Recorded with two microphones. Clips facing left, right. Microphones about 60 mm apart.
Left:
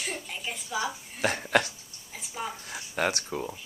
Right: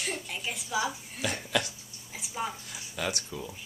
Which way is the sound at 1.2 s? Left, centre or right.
Left.